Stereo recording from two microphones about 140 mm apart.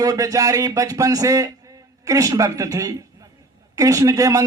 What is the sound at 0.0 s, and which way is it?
A man's voice, 25° right (ahead or behind).